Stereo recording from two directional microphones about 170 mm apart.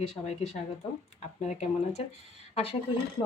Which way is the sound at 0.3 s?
40° left (ahead or behind).